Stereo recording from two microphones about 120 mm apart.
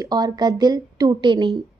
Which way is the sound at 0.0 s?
35° right (ahead or behind).